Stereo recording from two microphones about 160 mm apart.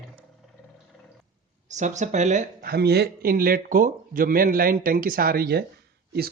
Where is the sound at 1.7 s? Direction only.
50° right (ahead or behind).